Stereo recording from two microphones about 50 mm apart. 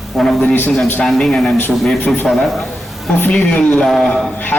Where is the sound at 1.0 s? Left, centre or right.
Centre.